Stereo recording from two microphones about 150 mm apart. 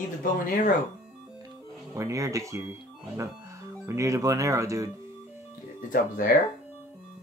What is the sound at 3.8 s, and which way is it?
Speech, 20° right (ahead or behind).